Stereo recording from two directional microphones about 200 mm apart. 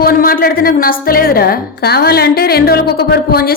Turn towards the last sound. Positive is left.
turn(degrees=50)  # may be behind; listen again after turning